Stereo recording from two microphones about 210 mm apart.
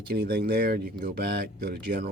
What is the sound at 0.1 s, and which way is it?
Speech, 50° right (ahead or behind).